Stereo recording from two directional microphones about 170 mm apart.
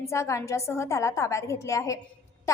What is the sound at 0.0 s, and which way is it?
A woman's voice, 15° left (ahead or behind).